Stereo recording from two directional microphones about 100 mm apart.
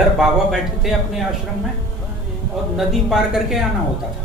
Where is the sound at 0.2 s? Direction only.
5° right (ahead or behind).